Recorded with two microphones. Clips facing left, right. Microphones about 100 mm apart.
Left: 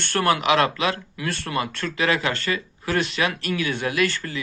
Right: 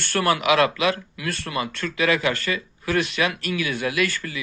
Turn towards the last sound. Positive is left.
turn(degrees=35)  # may be behind; listen again after turning